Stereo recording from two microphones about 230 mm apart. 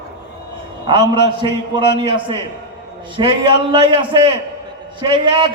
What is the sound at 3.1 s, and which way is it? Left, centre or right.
A man's voice, right.